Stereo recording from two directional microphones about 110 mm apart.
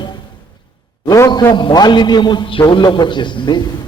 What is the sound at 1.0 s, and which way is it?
Speech, 30° left (ahead or behind).